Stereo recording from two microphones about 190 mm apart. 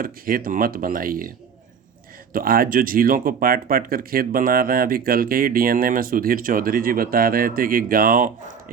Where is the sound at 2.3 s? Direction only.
50° right (ahead or behind).